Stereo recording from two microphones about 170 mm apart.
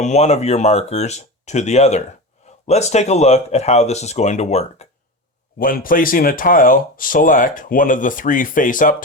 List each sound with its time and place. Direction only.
0.0 s speech: 40° left (ahead or behind)
5.5 s speech: 55° left (ahead or behind)